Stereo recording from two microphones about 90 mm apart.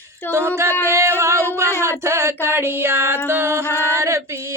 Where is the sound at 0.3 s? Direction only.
25° right (ahead or behind).